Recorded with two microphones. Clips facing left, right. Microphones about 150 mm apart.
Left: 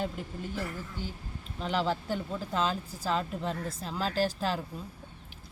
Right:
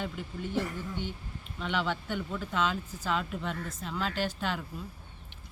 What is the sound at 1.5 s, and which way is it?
Speech, 35° left (ahead or behind).